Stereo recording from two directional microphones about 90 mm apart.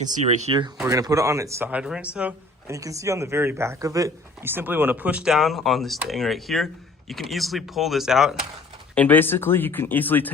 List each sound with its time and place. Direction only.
0.5 s speech: 70° right (ahead or behind)
0.9 s speech: 40° right (ahead or behind)
1.8 s speech: 10° right (ahead or behind)
2.6 s speech: 35° right (ahead or behind)
4.4 s speech: 25° right (ahead or behind); by 8.4 s 5° right (ahead or behind)
9.0 s speech: 20° left (ahead or behind)